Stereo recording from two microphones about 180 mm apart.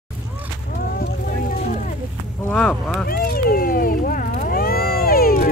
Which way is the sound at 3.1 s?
55° left (ahead or behind).